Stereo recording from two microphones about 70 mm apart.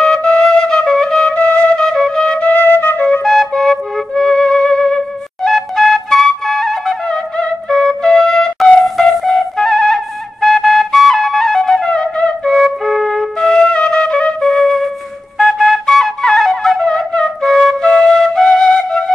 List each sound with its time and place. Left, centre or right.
0.0 s flute: centre
1.3 s flute: centre
1.8 s flute: centre
2.4 s flute: left
3.3 s flute: centre
12.5 s flute: centre